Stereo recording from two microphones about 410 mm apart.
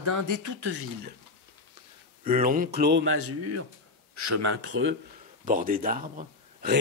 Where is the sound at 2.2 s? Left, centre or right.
Centre.